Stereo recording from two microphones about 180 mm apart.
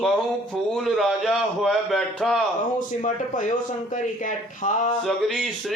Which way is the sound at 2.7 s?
45° left (ahead or behind).